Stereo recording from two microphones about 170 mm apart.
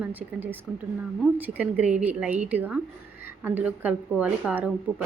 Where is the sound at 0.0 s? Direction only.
10° right (ahead or behind).